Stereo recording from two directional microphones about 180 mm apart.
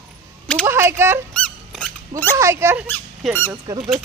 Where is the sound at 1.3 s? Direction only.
5° left (ahead or behind).